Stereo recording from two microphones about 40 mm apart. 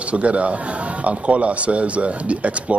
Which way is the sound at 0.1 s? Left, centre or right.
Right.